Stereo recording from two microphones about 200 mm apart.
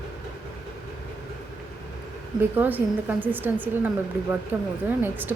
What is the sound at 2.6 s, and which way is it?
A woman's voice, 10° right (ahead or behind).